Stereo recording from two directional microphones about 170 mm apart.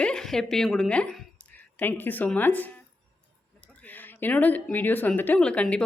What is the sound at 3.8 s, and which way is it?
Speech, 10° left (ahead or behind).